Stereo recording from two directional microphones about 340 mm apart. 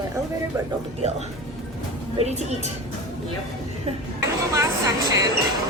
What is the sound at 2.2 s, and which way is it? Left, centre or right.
Speech, centre.